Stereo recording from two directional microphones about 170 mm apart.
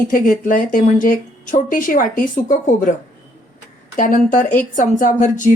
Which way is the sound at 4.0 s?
50° left (ahead or behind).